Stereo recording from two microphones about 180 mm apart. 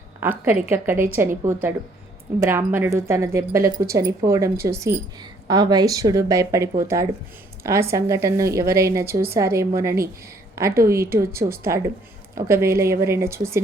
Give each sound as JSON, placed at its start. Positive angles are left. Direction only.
{"t": 0.2, "sound": "speech", "side_deg": -10}